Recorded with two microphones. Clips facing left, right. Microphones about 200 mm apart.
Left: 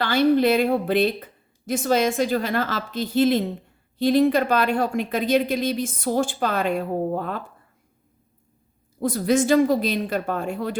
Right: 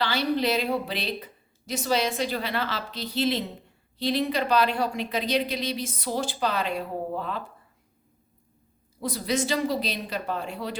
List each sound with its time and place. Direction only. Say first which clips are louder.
0.0 s speech: left 7 dB; 50° left (ahead or behind)
9.0 s speech: left 7 dB; 50° left (ahead or behind)